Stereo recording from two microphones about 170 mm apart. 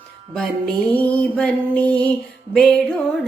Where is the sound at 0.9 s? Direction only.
10° left (ahead or behind).